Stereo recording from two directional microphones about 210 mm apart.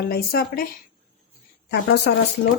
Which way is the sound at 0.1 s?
45° left (ahead or behind).